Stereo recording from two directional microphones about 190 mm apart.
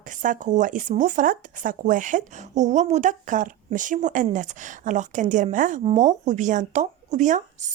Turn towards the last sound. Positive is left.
turn(degrees=-40)  # may be behind; listen again after turning